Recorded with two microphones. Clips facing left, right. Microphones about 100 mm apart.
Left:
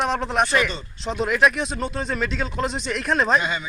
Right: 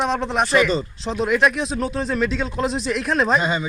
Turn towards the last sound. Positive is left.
turn(degrees=-30)  # may be behind; listen again after turning